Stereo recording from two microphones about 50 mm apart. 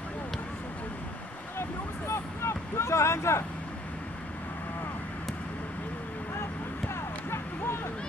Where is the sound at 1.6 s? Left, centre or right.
Left.